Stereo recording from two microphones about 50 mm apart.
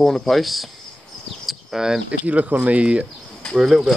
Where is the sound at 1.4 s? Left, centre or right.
Centre.